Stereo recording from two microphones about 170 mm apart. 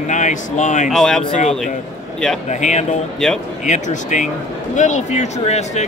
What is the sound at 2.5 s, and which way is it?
A man's voice, 45° left (ahead or behind).